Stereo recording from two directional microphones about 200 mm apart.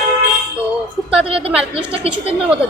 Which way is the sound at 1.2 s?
30° right (ahead or behind).